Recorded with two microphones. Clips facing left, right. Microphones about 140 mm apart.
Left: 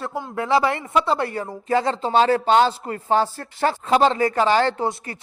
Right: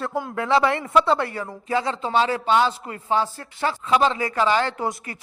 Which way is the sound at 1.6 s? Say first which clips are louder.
Left 3 dB; 40° left (ahead or behind).